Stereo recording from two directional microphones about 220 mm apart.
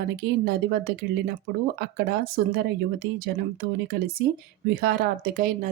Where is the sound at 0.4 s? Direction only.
45° right (ahead or behind).